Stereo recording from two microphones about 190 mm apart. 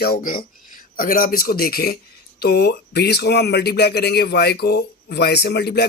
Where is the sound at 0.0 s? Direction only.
50° left (ahead or behind).